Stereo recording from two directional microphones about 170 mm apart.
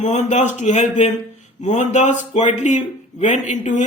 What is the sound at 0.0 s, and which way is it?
Speech, 45° left (ahead or behind).